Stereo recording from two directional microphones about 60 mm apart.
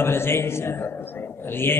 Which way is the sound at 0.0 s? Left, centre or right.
Left.